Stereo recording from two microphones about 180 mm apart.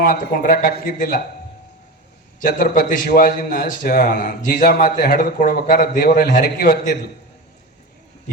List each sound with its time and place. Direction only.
0.0 s a man's voice: 55° left (ahead or behind)
2.4 s a man's voice: 55° left (ahead or behind)